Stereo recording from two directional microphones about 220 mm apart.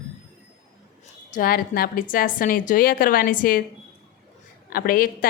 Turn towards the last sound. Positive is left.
turn(degrees=40)  # may be behind; listen again after turning